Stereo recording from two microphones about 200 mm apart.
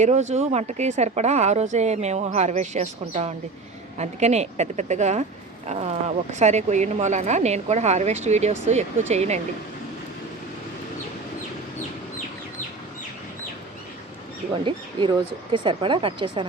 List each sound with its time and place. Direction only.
0.0 s speech: 35° right (ahead or behind)
14.5 s speech: 25° right (ahead or behind)